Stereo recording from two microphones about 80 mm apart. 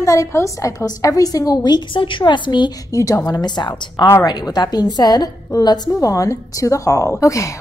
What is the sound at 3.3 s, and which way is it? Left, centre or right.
A woman's voice, left.